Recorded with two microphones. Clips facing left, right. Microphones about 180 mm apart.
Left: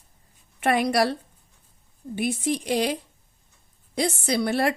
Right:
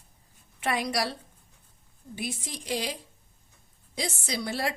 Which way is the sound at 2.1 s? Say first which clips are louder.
Left 11 dB; 60° left (ahead or behind).